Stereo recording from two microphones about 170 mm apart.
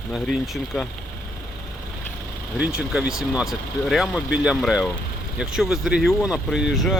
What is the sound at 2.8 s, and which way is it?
Speech, 5° right (ahead or behind).